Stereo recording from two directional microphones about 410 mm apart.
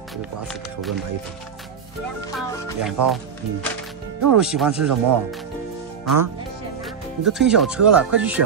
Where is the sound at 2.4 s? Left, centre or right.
Centre.